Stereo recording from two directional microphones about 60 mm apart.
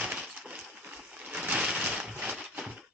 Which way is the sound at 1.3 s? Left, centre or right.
Centre.